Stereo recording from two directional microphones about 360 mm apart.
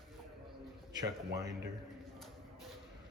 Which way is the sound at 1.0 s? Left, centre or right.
Centre.